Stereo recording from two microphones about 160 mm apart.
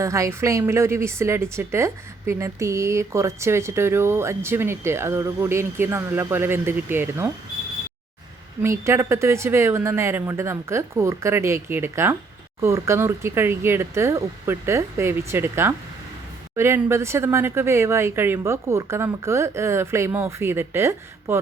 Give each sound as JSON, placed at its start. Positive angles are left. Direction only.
{"t": 0.0, "sound": "a woman's voice", "side_deg": -20}
{"t": 8.8, "sound": "a woman's voice", "side_deg": -15}